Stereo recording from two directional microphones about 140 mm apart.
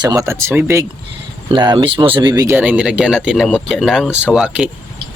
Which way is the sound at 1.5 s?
35° right (ahead or behind).